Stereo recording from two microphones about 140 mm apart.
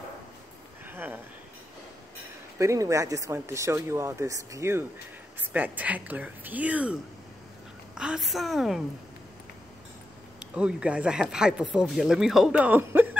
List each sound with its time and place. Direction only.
0.8 s a sound: 15° right (ahead or behind)
2.6 s a woman's voice: 20° right (ahead or behind); by 8.8 s centre (ahead or behind)
10.5 s speech: 5° right (ahead or behind)